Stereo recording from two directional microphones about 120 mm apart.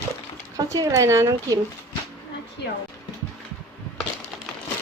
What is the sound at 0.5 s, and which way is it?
Speech, 30° right (ahead or behind).